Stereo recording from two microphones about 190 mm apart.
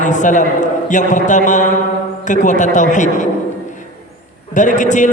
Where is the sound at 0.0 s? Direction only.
40° left (ahead or behind).